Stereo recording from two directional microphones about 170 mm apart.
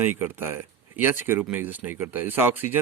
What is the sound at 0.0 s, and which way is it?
Speech, 10° right (ahead or behind).